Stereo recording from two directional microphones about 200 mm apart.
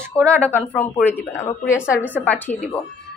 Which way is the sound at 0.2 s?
5° left (ahead or behind).